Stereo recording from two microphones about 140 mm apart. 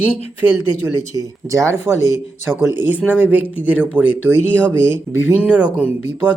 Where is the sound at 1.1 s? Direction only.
25° right (ahead or behind).